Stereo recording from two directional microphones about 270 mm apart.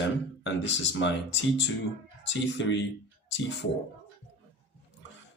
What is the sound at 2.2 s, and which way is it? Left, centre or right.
Speech, left.